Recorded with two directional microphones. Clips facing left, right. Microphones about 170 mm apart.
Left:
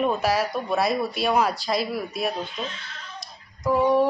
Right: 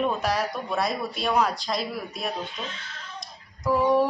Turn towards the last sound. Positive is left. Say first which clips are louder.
# left 1 dB
turn(degrees=0)  # may be behind; listen again after turning